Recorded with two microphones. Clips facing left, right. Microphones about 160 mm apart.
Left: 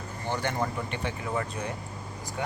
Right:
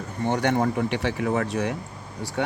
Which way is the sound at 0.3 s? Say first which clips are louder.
Right 7 dB; 70° right (ahead or behind).